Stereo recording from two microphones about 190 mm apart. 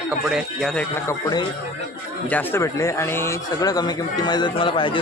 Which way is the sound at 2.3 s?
10° left (ahead or behind).